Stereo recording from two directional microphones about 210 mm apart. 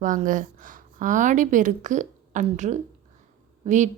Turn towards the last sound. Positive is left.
turn(degrees=-35)  # may be behind; listen again after turning